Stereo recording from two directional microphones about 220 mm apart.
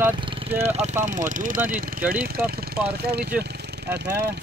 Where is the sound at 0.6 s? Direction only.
30° right (ahead or behind).